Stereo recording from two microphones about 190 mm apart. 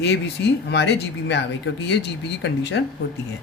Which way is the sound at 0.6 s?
65° left (ahead or behind).